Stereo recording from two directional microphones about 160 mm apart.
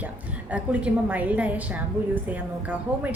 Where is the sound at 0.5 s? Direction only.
10° right (ahead or behind).